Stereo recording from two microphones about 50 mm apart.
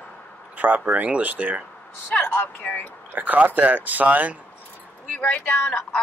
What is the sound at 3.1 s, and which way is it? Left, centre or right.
Speech, right.